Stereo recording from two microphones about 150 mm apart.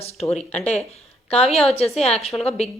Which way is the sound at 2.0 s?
45° left (ahead or behind).